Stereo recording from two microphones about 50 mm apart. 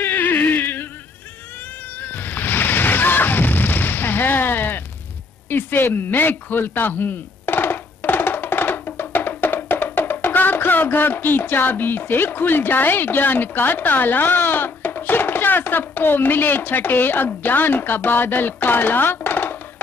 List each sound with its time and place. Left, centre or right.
0.0 s a sound: left
2.0 s music: left
5.5 s speech: left